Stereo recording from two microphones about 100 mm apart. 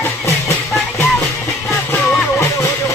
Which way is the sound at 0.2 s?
30° left (ahead or behind).